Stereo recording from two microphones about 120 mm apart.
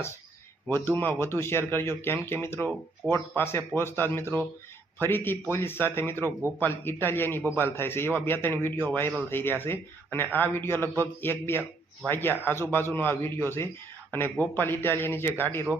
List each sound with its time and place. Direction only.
0.7 s a man's voice: 20° left (ahead or behind)